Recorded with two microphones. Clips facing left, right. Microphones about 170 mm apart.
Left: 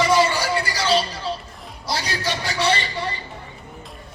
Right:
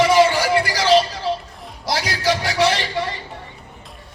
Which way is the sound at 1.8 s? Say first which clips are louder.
Right 5 dB; 90° right.